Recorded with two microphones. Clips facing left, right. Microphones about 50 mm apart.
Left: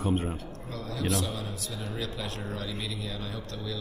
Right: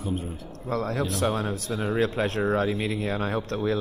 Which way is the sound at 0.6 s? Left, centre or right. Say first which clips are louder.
Right 6 dB; right.